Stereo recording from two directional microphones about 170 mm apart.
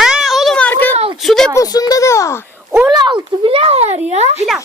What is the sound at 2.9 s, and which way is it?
Speech, 25° right (ahead or behind).